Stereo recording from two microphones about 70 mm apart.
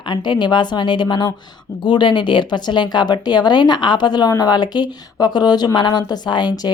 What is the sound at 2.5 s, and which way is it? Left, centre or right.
Speech, left.